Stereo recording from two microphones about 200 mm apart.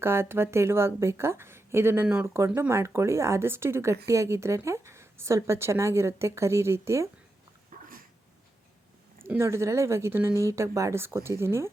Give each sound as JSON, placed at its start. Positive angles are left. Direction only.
{"t": 0.0, "sound": "a woman's voice", "side_deg": -10}
{"t": 7.7, "sound": "dog", "side_deg": -45}
{"t": 9.2, "sound": "a woman's voice", "side_deg": -15}